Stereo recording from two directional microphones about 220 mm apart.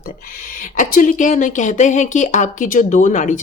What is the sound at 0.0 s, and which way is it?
A woman's voice, 40° left (ahead or behind).